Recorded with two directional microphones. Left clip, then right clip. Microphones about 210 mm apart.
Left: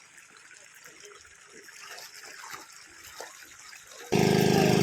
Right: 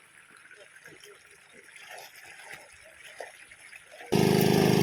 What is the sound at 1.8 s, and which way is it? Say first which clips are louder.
Gush: even; 35° left (ahead or behind).